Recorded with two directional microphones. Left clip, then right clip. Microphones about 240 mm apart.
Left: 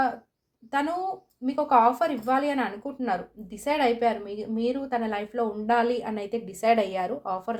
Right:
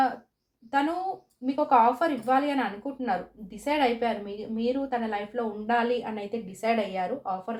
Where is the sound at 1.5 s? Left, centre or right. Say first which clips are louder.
Left 1 dB; left.